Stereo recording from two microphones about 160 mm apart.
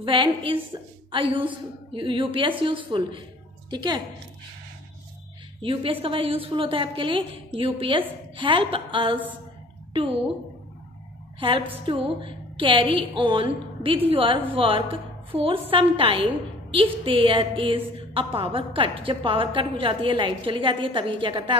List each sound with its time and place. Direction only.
0.0 s a woman's voice: 30° right (ahead or behind)
5.6 s a woman's voice: 35° right (ahead or behind)
11.8 s a woman's voice: 30° right (ahead or behind)